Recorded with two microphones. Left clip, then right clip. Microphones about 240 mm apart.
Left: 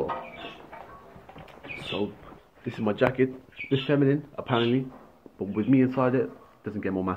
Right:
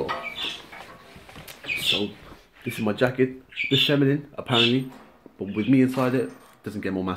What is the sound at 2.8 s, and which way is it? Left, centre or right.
Speech, right.